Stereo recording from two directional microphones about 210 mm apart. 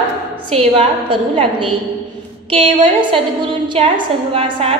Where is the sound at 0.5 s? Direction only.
25° right (ahead or behind).